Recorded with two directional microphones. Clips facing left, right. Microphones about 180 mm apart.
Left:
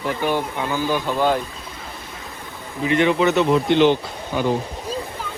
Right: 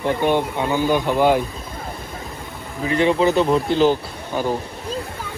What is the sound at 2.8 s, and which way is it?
Speech, 35° right (ahead or behind).